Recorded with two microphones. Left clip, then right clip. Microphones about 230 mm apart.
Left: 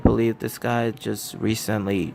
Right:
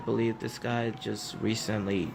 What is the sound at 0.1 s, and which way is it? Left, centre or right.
Speech, left.